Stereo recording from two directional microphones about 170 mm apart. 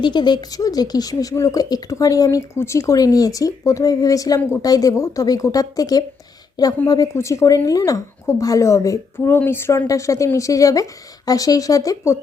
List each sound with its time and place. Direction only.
0.0 s speech: 25° left (ahead or behind)